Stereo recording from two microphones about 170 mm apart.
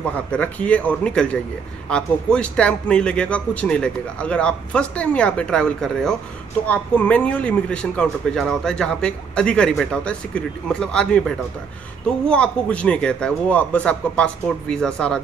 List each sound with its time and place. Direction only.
0.0 s a man's voice: 10° left (ahead or behind)